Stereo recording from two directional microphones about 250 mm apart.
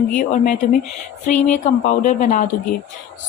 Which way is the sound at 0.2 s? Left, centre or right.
Left.